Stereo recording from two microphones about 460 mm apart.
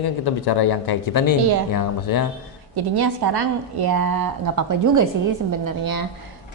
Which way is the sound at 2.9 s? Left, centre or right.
Right.